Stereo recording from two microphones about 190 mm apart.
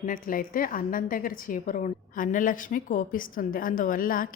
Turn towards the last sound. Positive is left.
turn(degrees=45)  # may be behind; listen again after turning